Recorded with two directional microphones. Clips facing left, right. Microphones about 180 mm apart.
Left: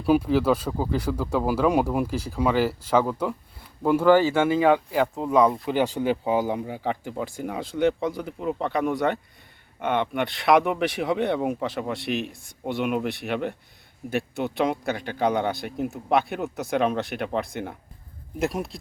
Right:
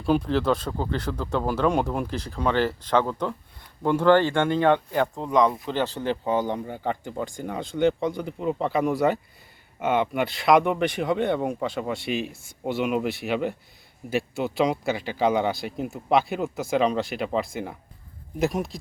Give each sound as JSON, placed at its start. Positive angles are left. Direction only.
{"t": 0.0, "sound": "speech", "side_deg": 5}